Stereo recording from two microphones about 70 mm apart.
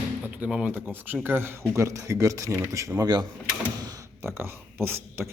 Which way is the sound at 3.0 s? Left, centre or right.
Right.